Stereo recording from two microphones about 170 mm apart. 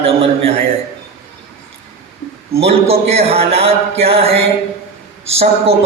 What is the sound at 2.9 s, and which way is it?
Speech, 35° right (ahead or behind).